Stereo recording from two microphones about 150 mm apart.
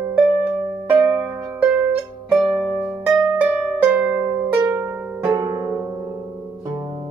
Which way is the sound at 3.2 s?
10° right (ahead or behind).